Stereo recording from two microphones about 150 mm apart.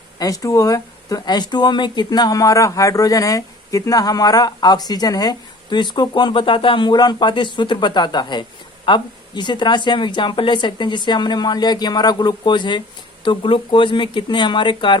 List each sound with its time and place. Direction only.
0.2 s speech: 25° left (ahead or behind)